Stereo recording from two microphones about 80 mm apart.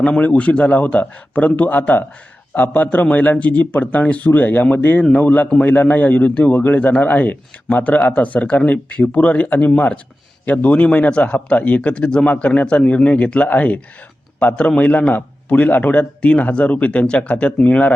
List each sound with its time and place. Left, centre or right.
0.0 s a man's voice: centre